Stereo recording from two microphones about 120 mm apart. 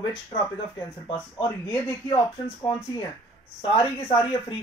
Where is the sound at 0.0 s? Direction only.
45° left (ahead or behind).